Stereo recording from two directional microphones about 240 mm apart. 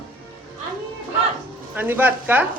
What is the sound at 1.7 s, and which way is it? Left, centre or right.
Speech, centre.